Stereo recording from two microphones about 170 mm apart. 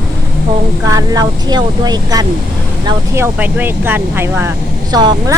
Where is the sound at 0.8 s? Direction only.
20° right (ahead or behind).